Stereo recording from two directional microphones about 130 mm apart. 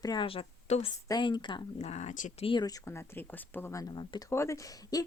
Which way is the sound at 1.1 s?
35° left (ahead or behind).